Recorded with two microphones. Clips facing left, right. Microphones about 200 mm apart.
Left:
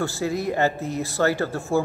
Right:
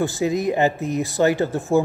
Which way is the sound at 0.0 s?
15° right (ahead or behind).